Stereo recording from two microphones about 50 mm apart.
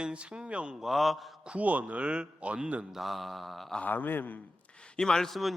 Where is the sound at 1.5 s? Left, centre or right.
Right.